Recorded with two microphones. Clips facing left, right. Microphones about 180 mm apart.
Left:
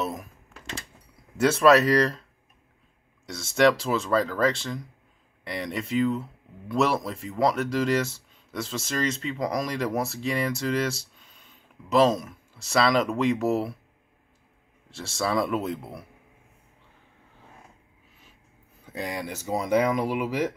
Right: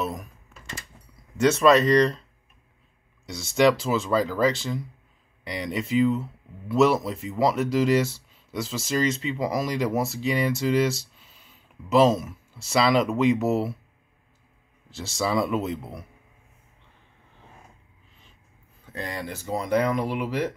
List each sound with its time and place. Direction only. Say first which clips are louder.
0.0 s speech: even; centre (ahead or behind)
0.5 s a sound: left 2 dB; 70° left (ahead or behind)
1.4 s speech: even; centre (ahead or behind)
3.3 s speech: right 1 dB; centre (ahead or behind)
15.0 s speech: right 1 dB; centre (ahead or behind)
18.9 s speech: left 1 dB; 10° left (ahead or behind)